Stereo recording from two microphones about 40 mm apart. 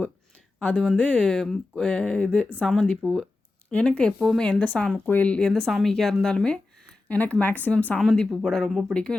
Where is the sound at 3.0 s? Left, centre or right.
Right.